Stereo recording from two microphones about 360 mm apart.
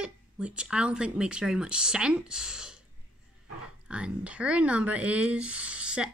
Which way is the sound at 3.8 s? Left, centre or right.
Centre.